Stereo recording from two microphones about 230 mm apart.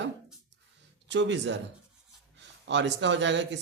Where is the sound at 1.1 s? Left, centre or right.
Right.